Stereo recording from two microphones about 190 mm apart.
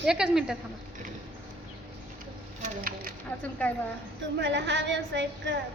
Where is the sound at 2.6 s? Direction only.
50° right (ahead or behind).